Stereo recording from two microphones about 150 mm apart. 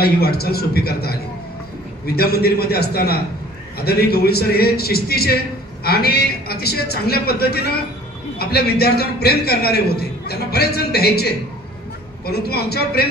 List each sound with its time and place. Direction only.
0.0 s a man's voice: 90° left